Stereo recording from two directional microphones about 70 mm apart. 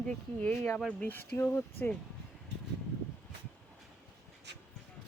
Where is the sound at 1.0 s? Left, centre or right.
Left.